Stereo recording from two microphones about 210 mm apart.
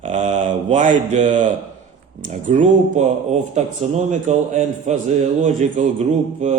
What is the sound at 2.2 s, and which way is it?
Speech, 35° right (ahead or behind).